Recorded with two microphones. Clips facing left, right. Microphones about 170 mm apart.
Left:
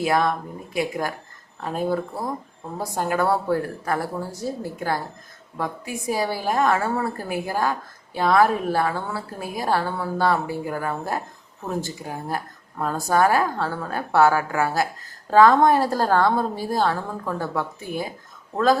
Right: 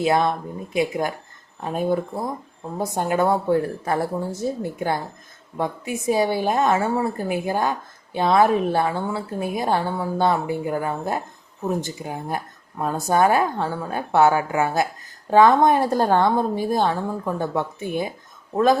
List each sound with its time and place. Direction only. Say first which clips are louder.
0.0 s a woman's voice: right 2 dB; 25° right (ahead or behind)